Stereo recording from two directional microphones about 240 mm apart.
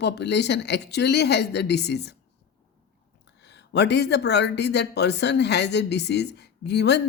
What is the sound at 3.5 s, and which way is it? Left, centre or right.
Speech, left.